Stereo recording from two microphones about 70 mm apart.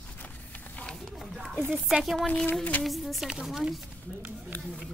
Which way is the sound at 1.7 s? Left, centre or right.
Centre.